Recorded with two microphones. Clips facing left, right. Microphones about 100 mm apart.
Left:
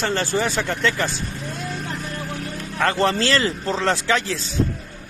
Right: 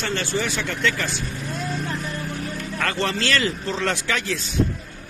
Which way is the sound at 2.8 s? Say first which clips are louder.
Left 5 dB; 30° left (ahead or behind).